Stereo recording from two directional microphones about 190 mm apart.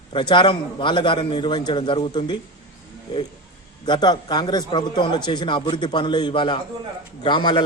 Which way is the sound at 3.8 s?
25° left (ahead or behind).